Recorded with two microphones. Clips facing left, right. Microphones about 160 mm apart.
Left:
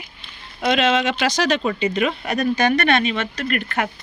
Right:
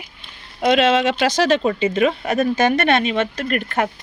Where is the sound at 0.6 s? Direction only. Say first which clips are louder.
Right 3 dB; 45° right (ahead or behind).